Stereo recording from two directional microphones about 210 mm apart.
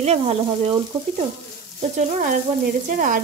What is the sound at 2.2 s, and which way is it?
Sizzle, 40° right (ahead or behind).